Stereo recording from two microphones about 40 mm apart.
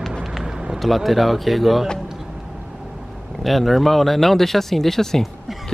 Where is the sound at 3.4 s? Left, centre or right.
Centre.